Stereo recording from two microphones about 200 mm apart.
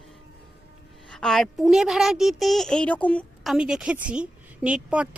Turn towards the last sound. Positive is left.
turn(degrees=-5)  # may be behind; listen again after turning